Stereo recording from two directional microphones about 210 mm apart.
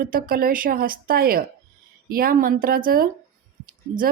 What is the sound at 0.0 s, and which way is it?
A woman's voice, 40° right (ahead or behind).